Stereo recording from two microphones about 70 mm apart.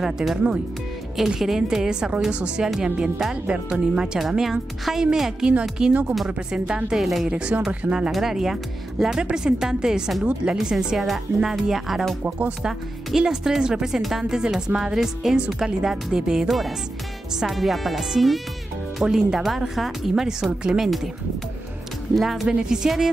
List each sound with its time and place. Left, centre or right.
0.0 s speech: centre
7.2 s speech: centre
12.2 s speech: right
12.6 s speech: centre
22.1 s speech: centre